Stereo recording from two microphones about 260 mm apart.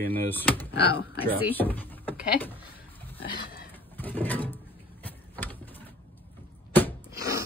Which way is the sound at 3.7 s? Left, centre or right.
Centre.